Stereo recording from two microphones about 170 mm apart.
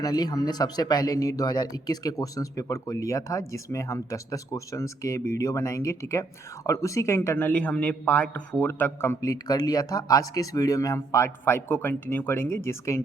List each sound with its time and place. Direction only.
0.0 s a man's voice: 25° left (ahead or behind)